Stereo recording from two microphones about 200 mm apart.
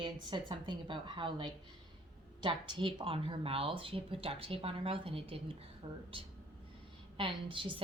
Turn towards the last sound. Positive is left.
turn(degrees=-25)  # may be behind; listen again after turning